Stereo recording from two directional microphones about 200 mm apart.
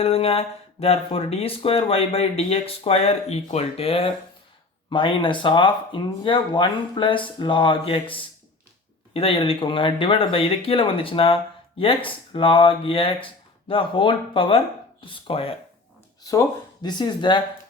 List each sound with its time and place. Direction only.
0.0 s speech: 30° left (ahead or behind)
9.1 s speech: 25° left (ahead or behind)
16.2 s speech: 15° left (ahead or behind)